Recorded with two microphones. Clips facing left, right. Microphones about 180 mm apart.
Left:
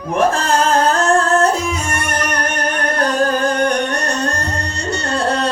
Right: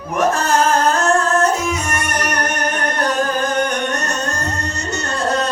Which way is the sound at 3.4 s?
35° left (ahead or behind).